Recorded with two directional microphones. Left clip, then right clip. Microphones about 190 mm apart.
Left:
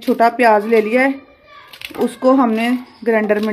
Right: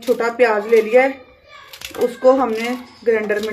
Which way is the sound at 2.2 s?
65° left (ahead or behind).